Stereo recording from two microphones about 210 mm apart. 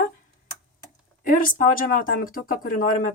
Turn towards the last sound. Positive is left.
turn(degrees=40)  # may be behind; listen again after turning